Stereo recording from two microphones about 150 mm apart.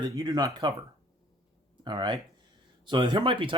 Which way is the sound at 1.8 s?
30° right (ahead or behind).